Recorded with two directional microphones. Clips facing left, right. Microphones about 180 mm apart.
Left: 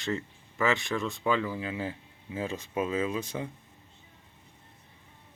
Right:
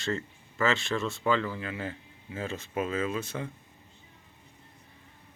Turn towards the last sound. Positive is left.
turn(degrees=15)  # may be behind; listen again after turning